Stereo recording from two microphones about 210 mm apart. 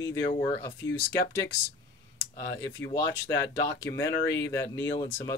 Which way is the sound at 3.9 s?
15° left (ahead or behind).